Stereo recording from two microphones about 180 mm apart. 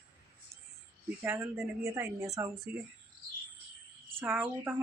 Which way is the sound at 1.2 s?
15° right (ahead or behind).